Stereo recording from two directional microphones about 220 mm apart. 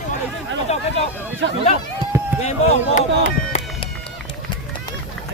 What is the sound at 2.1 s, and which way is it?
Run, 10° right (ahead or behind).